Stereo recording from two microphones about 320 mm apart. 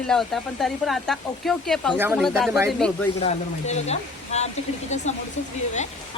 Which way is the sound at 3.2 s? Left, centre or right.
Centre.